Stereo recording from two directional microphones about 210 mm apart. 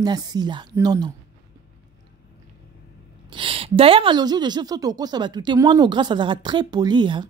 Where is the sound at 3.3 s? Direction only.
25° right (ahead or behind).